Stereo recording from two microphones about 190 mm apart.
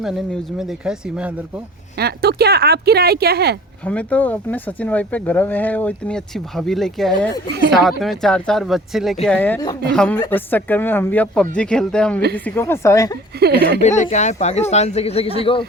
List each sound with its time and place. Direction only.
0.0 s speech: centre (ahead or behind)
2.0 s speech: 55° right (ahead or behind)
3.8 s speech: 5° left (ahead or behind)
13.4 s speech: 60° right (ahead or behind)
13.8 s speech: 40° left (ahead or behind)